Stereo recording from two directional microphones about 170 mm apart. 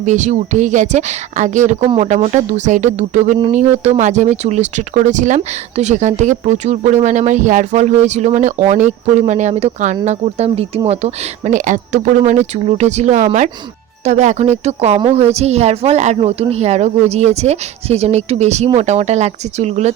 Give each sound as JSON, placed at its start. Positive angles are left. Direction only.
{"t": 0.0, "sound": "speech", "side_deg": -45}